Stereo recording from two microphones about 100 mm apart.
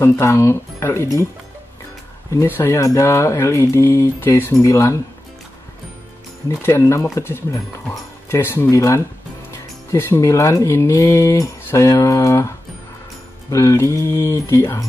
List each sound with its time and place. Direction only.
0.0 s speech: 30° left (ahead or behind)
2.4 s speech: 20° left (ahead or behind)
6.6 s speech: 25° left (ahead or behind)